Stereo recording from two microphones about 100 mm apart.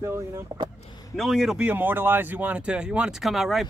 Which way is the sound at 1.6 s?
15° right (ahead or behind).